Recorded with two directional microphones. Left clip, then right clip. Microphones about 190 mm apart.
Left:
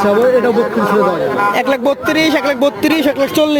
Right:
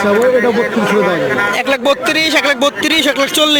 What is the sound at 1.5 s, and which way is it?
Speech, 15° left (ahead or behind).